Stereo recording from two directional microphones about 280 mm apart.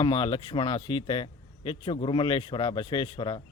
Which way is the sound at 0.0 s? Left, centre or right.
Centre.